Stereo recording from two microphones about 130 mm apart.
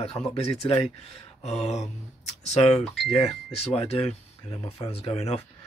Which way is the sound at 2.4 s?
60° left (ahead or behind).